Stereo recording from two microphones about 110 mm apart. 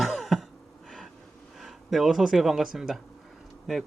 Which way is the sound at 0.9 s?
5° left (ahead or behind).